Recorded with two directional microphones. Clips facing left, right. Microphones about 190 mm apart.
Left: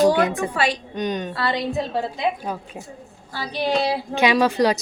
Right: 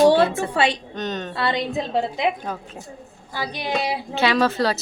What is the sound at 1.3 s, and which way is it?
Speech, 25° right (ahead or behind).